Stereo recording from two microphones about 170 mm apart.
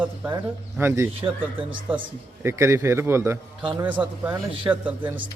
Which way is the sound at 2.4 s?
15° right (ahead or behind).